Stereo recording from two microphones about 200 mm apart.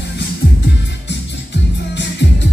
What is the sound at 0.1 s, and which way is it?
Music, 60° left (ahead or behind).